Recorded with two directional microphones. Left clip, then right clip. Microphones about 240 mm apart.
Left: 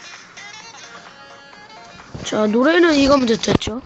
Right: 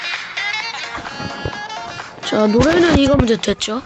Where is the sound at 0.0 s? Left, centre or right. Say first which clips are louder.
Right 14 dB; right.